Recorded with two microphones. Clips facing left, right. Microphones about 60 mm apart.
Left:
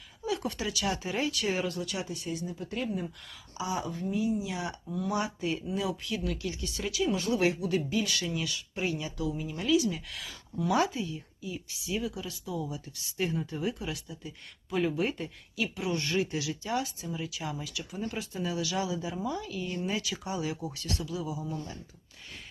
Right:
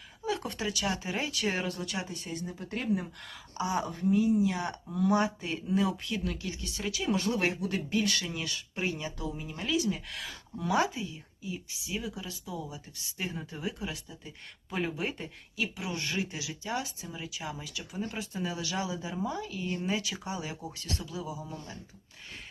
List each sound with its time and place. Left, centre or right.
0.3 s speech: right
5.1 s speech: right
7.7 s speech: right
8.4 s speech: right
9.8 s speech: right
10.7 s speech: right